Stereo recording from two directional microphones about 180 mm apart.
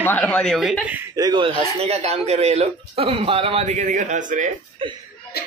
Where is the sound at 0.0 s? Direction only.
10° left (ahead or behind); by 1.2 s 10° right (ahead or behind).